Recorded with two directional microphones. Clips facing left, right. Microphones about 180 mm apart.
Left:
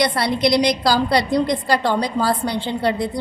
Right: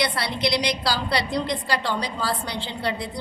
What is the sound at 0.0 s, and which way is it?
A woman's voice, 45° left (ahead or behind).